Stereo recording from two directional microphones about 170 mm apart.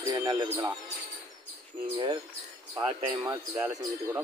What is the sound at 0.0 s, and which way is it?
Speech, 20° right (ahead or behind).